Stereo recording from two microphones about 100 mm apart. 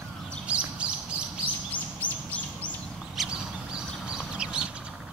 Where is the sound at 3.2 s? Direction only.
Centre (ahead or behind).